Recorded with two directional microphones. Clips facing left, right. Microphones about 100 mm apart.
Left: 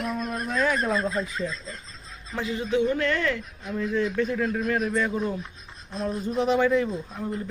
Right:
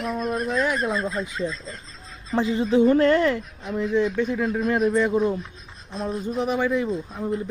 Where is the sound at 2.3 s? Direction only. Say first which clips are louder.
Right 6 dB; 30° right (ahead or behind).